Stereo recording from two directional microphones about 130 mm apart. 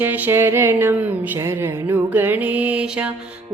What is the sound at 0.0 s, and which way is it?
Music, 15° right (ahead or behind).